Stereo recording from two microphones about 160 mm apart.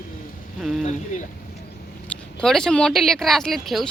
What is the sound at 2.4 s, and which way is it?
Speech, 5° left (ahead or behind).